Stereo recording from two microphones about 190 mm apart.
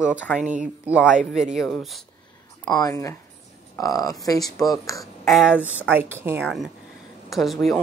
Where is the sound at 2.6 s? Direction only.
20° left (ahead or behind).